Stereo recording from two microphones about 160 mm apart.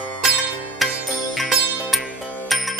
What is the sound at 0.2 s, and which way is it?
Music, centre (ahead or behind).